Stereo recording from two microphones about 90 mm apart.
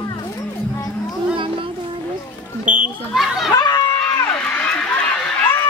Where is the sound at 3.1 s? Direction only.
Centre (ahead or behind).